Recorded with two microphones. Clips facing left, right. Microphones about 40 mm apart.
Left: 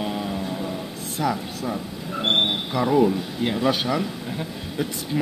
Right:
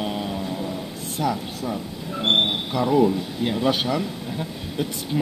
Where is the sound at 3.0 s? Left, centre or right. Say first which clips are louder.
Even; centre.